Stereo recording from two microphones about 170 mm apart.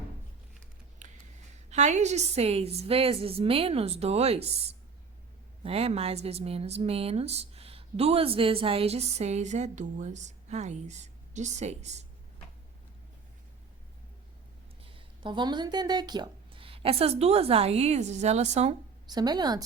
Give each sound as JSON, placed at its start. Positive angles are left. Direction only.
{"t": 1.7, "sound": "speech", "side_deg": -45}
{"t": 14.9, "sound": "speech", "side_deg": -30}
{"t": 19.0, "sound": "a woman's voice", "side_deg": -25}